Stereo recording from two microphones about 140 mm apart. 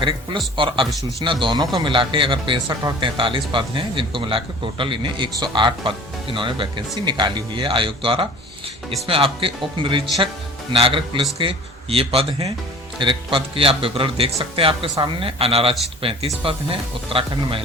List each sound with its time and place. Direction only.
0.0 s a man's voice: 35° right (ahead or behind)